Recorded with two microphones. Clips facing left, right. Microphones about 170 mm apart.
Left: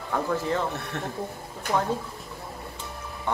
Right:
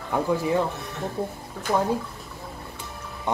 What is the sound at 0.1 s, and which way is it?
Speech, 15° right (ahead or behind).